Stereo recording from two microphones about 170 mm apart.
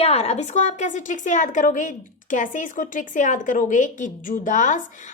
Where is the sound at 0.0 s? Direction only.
35° left (ahead or behind).